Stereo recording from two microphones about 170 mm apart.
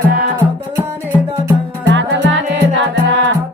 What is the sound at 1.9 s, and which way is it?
Music, 90° right.